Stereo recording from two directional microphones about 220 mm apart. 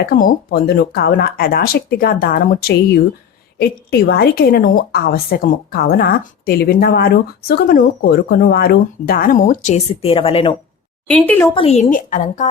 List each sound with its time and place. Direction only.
0.0 s a woman's voice: 45° left (ahead or behind); by 10.5 s 25° left (ahead or behind)
11.1 s speech: 5° left (ahead or behind)
11.5 s a woman's voice: 30° left (ahead or behind)